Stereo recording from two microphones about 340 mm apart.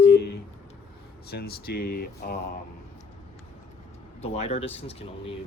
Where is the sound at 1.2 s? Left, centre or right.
Left.